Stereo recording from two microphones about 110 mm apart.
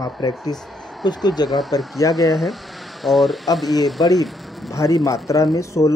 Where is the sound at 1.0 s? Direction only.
40° left (ahead or behind).